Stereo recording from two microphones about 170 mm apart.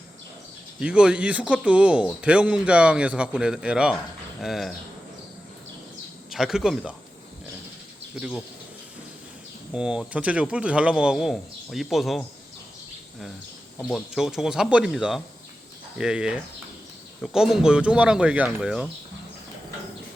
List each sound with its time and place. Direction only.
0.8 s speech: 5° right (ahead or behind)
6.3 s speech: 5° right (ahead or behind)
8.1 s speech: 5° right (ahead or behind)
9.7 s speech: 5° right (ahead or behind)
13.8 s speech: centre (ahead or behind)